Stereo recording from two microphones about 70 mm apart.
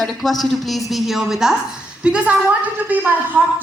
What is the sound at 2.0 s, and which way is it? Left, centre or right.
A woman's voice, centre.